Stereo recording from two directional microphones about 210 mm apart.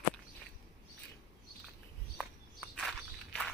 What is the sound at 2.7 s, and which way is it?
Walk, centre (ahead or behind).